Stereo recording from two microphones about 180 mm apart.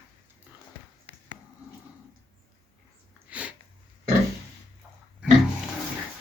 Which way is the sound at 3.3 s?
10° right (ahead or behind).